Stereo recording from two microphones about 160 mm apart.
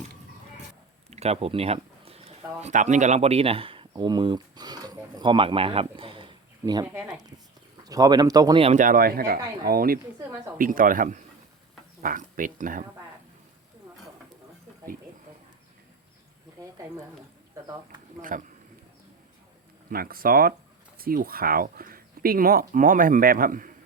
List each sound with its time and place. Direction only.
1.1 s speech: 40° right (ahead or behind); by 8.6 s 25° right (ahead or behind)
8.6 s speech: 50° right (ahead or behind)
18.2 s speech: 55° right (ahead or behind)
19.9 s speech: 65° right (ahead or behind)